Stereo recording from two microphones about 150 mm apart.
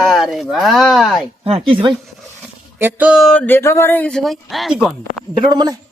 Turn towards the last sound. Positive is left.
turn(degrees=-30)  # may be behind; listen again after turning